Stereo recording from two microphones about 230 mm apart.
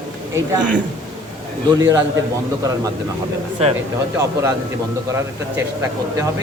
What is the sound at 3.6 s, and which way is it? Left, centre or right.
Speech, right.